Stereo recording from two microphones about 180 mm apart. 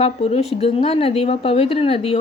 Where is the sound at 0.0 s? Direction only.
35° left (ahead or behind).